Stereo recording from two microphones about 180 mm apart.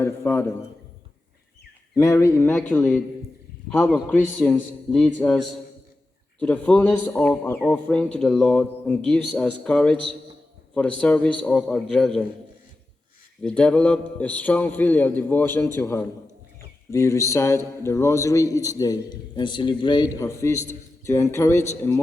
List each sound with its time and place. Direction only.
0.0 s a man's voice: 10° left (ahead or behind)
2.0 s a man's voice: 20° left (ahead or behind)
11.0 s a man's voice: 10° left (ahead or behind)
13.4 s a man's voice: 5° left (ahead or behind)